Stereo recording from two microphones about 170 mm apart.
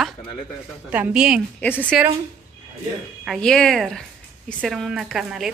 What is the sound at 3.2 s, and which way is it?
A woman's voice, centre (ahead or behind).